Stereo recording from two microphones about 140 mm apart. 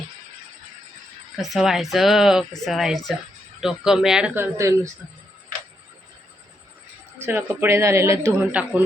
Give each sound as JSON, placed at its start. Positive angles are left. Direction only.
{"t": 1.4, "sound": "speech", "side_deg": 0}
{"t": 4.5, "sound": "speech", "side_deg": -20}
{"t": 7.2, "sound": "speech", "side_deg": -15}